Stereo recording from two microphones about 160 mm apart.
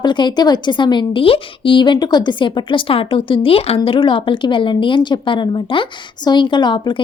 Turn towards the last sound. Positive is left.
turn(degrees=30)  # may be behind; listen again after turning